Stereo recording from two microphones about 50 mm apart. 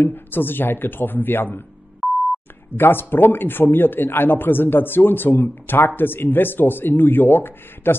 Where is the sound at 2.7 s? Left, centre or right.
Left.